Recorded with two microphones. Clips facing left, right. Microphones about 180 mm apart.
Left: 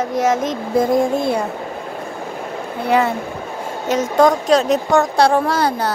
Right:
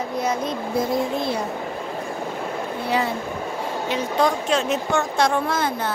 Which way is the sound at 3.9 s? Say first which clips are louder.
Left 8 dB; 45° left (ahead or behind).